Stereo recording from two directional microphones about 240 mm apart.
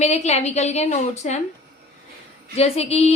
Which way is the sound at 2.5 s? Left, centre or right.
Left.